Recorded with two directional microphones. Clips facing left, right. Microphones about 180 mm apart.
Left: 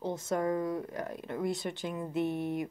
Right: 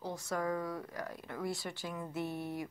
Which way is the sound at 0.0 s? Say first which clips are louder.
Left 5 dB; 20° left (ahead or behind).